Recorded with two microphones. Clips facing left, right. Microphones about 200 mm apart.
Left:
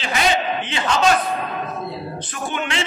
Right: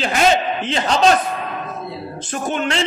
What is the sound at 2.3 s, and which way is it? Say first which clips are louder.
Speech: right 6 dB; 40° right (ahead or behind).